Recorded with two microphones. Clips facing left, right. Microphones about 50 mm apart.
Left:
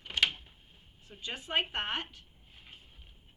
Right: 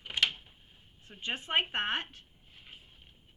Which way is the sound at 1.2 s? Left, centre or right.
Right.